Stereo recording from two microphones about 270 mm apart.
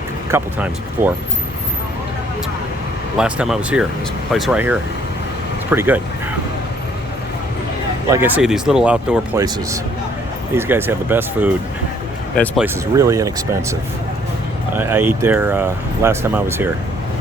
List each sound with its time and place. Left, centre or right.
0.3 s speech: centre
3.2 s speech: centre
8.1 s speech: centre
14.8 s speech: centre